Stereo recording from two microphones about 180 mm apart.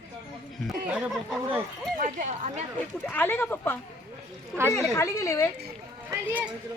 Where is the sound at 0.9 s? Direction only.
5° right (ahead or behind).